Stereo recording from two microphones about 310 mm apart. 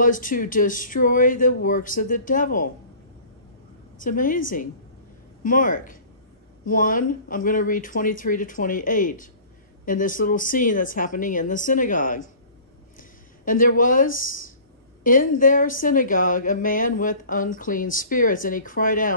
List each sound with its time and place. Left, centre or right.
0.0 s a woman's voice: left
4.0 s a woman's voice: left
13.5 s a woman's voice: left